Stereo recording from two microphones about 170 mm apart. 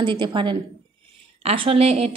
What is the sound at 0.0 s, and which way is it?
A woman's voice, 30° right (ahead or behind).